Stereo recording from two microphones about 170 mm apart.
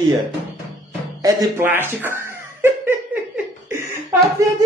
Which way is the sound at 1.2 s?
15° right (ahead or behind).